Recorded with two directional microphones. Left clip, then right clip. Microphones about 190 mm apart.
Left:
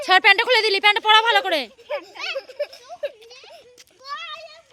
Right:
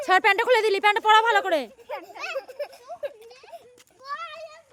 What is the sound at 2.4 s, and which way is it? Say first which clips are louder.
Children playing: left 5 dB; 50° right (ahead or behind).